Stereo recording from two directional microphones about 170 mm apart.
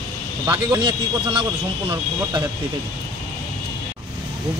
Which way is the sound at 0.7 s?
30° right (ahead or behind).